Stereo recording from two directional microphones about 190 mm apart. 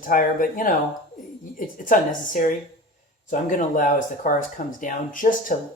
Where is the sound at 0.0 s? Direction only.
45° left (ahead or behind).